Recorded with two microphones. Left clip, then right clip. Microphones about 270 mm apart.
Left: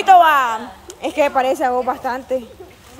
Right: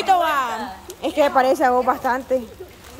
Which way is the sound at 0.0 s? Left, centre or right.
Centre.